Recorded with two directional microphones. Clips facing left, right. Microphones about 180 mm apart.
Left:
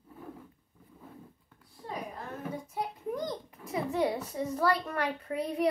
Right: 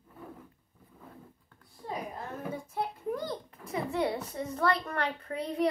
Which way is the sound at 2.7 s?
15° left (ahead or behind).